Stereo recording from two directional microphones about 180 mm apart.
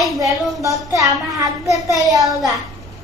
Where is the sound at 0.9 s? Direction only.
20° right (ahead or behind).